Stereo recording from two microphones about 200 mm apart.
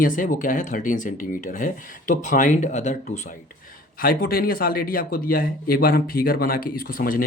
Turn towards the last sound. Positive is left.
turn(degrees=45)  # may be behind; listen again after turning